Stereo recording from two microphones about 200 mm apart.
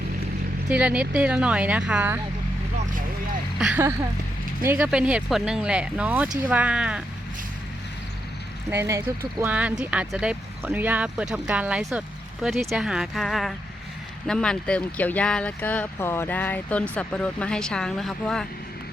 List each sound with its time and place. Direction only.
0.7 s speech: 5° right (ahead or behind)
3.6 s speech: 10° right (ahead or behind)
8.7 s speech: 15° right (ahead or behind); by 18.4 s 5° left (ahead or behind)